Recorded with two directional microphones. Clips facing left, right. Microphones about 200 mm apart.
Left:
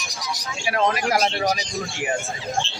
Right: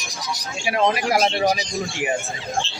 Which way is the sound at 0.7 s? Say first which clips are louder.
Right 2 dB; 20° right (ahead or behind).